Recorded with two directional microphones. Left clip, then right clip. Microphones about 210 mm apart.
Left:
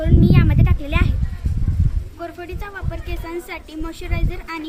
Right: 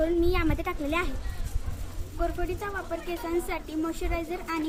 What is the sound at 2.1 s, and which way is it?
Speech, 10° left (ahead or behind).